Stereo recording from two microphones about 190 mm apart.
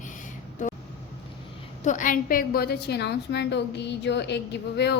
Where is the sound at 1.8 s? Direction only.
40° left (ahead or behind).